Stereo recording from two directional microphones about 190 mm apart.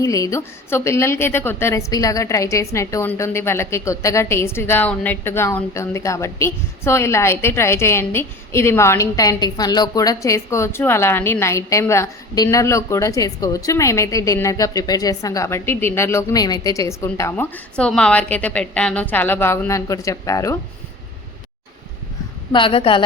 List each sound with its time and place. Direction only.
0.0 s a woman's voice: 15° left (ahead or behind)
22.5 s a woman's voice: 30° left (ahead or behind)